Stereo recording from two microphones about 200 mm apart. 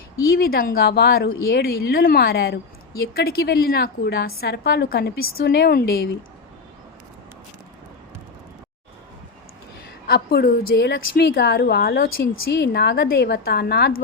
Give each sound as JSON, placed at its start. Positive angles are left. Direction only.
{"t": 0.2, "sound": "a woman's voice", "side_deg": 50}
{"t": 10.1, "sound": "a woman's voice", "side_deg": 50}